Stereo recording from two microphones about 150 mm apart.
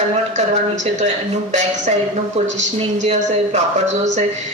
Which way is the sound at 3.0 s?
45° right (ahead or behind).